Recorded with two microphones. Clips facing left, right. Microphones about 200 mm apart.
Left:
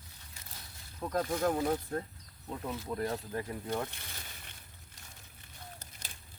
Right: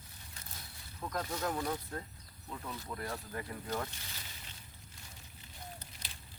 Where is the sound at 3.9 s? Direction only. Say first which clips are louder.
Left 2 dB; 60° left (ahead or behind).